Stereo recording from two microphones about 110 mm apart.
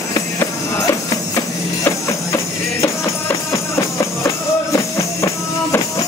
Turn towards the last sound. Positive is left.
turn(degrees=25)  # may be behind; listen again after turning